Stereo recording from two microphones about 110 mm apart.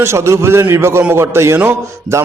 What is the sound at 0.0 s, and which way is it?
A man's voice, 25° right (ahead or behind).